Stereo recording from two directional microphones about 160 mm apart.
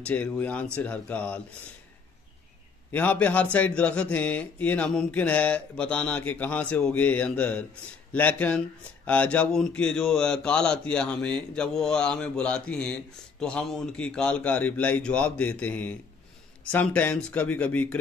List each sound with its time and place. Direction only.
0.0 s a man's voice: 10° left (ahead or behind)
2.9 s a man's voice: 10° left (ahead or behind)